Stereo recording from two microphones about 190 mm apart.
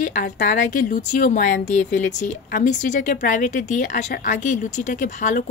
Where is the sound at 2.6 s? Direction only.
40° left (ahead or behind).